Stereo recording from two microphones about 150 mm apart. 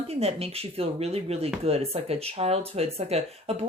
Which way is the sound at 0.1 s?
45° right (ahead or behind).